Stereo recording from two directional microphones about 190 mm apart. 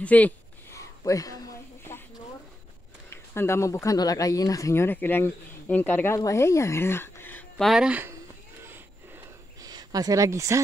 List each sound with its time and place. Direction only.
0.0 s a sound: 10° left (ahead or behind)
3.3 s speech: 15° left (ahead or behind); by 8.2 s 10° right (ahead or behind)
9.6 s speech: 20° right (ahead or behind)